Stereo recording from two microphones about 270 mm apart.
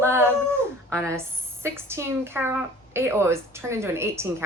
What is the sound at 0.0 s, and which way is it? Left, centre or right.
Dog, centre.